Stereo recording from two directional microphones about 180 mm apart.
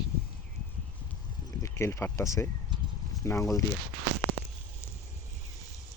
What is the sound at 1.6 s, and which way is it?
Speech, 15° left (ahead or behind).